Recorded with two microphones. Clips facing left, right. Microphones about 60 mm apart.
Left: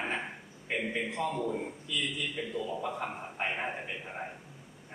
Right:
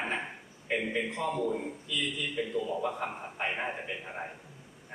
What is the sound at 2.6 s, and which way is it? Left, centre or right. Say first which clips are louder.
Speech: right 2 dB; centre.